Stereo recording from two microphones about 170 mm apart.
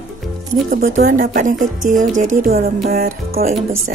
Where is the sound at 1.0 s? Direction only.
55° right (ahead or behind).